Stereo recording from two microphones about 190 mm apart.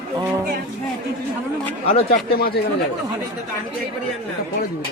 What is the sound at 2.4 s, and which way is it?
Speech, 55° left (ahead or behind).